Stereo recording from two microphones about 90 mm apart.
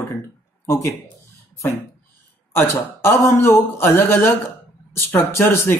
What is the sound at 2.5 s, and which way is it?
A man's voice, 25° left (ahead or behind).